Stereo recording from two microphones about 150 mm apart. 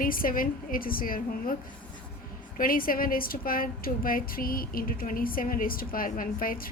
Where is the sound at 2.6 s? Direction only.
70° left (ahead or behind).